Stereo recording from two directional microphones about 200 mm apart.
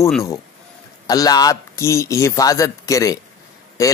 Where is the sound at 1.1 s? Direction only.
20° left (ahead or behind).